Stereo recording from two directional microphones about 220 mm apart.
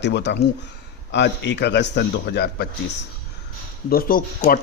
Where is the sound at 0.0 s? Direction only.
50° left (ahead or behind).